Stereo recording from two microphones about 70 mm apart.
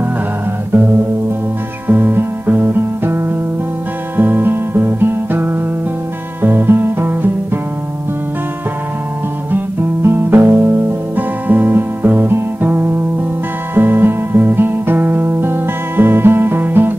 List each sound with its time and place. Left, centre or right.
1.9 s music: right
10.0 s music: right